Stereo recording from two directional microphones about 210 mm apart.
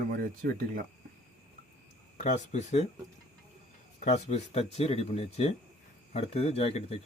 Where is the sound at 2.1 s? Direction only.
35° left (ahead or behind).